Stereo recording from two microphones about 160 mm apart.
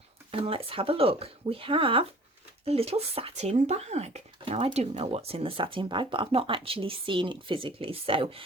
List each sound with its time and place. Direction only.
0.4 s speech: 35° right (ahead or behind)